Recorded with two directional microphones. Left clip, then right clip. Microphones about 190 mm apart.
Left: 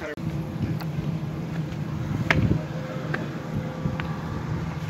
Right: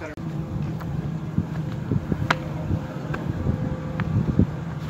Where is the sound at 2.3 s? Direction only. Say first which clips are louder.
Left 1 dB; 15° right (ahead or behind).